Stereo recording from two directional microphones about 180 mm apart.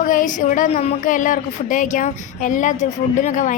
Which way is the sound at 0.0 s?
45° left (ahead or behind).